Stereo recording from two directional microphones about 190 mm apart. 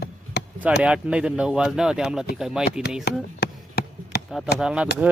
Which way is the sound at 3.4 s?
60° left (ahead or behind).